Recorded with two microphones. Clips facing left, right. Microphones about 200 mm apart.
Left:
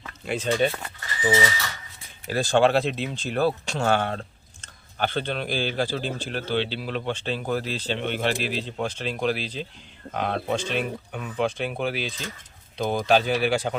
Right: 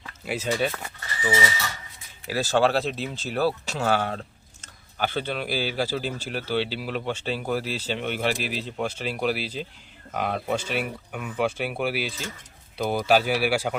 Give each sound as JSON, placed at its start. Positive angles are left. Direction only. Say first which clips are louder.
{"t": 0.3, "sound": "speech", "louder": "left 3 dB", "side_deg": -5}
{"t": 1.2, "sound": "speech", "louder": "left 3 dB", "side_deg": 25}
{"t": 2.3, "sound": "speech", "louder": "left 2 dB", "side_deg": -5}